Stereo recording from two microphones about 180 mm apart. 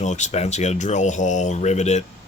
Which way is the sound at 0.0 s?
40° left (ahead or behind).